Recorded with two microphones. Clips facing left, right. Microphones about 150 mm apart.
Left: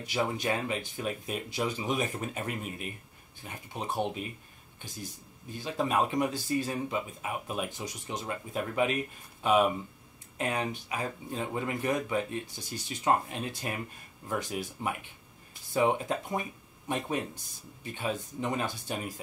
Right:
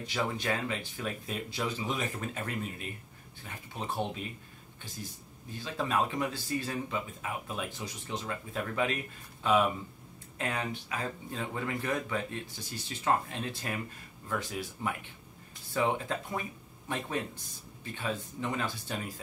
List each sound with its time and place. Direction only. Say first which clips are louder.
0.0 s speech: left 2 dB; 15° left (ahead or behind)
5.6 s speech: left 2 dB; 15° left (ahead or behind)